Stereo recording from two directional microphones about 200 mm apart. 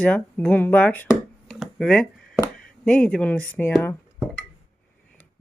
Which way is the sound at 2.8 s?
5° left (ahead or behind).